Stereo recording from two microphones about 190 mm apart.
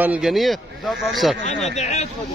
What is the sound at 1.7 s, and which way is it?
Speech, 35° left (ahead or behind).